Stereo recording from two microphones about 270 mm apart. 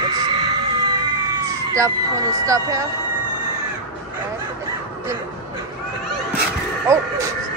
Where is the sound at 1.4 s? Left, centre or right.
Centre.